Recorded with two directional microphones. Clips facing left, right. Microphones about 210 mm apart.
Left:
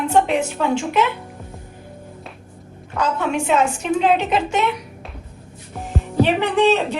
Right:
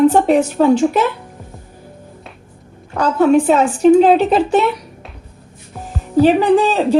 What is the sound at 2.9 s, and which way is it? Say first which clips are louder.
A woman's voice: right 9 dB; 40° right (ahead or behind).